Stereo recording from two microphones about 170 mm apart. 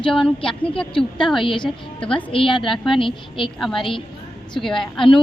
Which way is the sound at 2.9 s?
30° left (ahead or behind).